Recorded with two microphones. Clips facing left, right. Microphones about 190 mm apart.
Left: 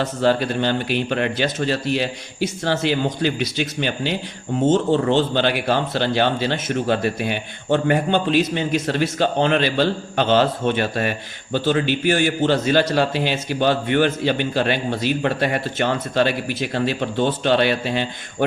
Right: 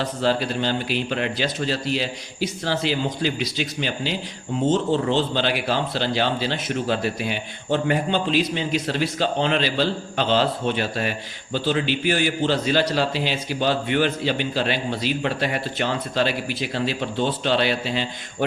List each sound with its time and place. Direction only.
0.0 s a man's voice: 55° left (ahead or behind)